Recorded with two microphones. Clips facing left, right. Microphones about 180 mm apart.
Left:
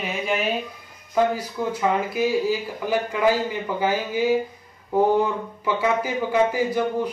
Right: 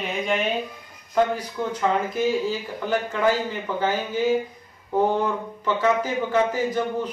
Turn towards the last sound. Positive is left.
turn(degrees=10)  # may be behind; listen again after turning